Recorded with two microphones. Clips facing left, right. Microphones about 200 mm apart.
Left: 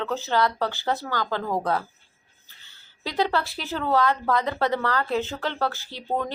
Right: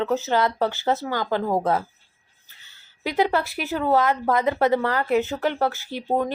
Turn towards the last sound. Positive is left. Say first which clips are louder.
# right 4 dB
turn(degrees=-15)  # may be behind; listen again after turning